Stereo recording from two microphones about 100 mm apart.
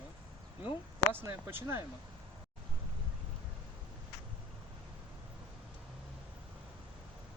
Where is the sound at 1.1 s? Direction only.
25° right (ahead or behind).